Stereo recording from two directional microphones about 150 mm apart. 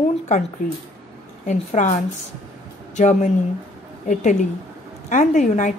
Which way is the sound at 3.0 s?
50° left (ahead or behind).